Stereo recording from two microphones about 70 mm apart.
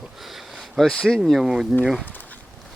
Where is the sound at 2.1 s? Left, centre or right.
Left.